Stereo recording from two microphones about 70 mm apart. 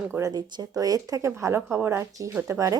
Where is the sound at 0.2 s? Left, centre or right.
Right.